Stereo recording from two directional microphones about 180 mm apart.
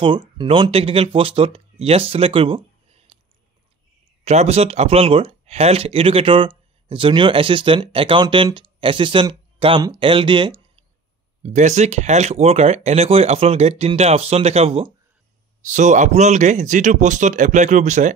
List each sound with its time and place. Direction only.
0.0 s speech: 25° right (ahead or behind)
4.2 s speech: 35° right (ahead or behind)
11.4 s speech: 40° right (ahead or behind)